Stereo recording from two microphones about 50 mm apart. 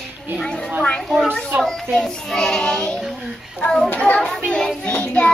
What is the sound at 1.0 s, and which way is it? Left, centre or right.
A child's voice, centre.